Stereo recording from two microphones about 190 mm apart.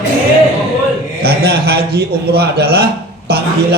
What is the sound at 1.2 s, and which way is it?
A man's voice, 55° right (ahead or behind).